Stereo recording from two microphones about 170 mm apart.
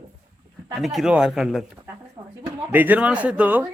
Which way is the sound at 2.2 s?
35° right (ahead or behind).